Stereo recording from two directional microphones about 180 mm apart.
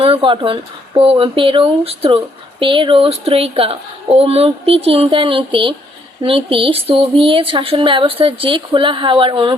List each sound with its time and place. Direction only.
0.0 s speech: 30° right (ahead or behind)